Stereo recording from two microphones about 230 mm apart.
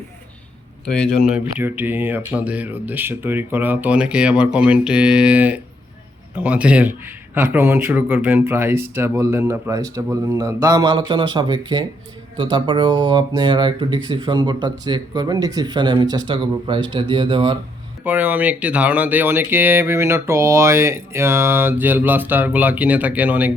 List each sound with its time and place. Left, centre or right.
0.9 s speech: centre; by 17.6 s right
18.0 s speech: centre